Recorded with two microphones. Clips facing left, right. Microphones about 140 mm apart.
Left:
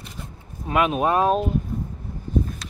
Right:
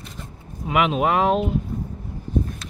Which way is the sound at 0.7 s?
90° right.